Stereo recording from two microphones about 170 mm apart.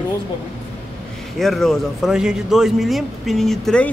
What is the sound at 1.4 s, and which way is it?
Speech, centre (ahead or behind).